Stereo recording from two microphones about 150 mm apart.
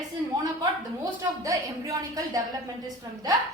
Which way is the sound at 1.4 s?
25° right (ahead or behind).